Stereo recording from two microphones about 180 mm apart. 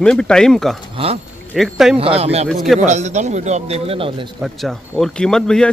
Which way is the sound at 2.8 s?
40° right (ahead or behind).